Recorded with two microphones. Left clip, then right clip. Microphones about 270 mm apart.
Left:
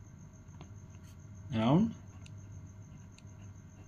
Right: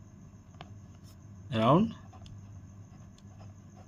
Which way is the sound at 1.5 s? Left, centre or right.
Right.